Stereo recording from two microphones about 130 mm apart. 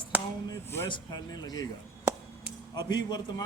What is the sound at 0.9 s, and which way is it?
Speech, 30° left (ahead or behind).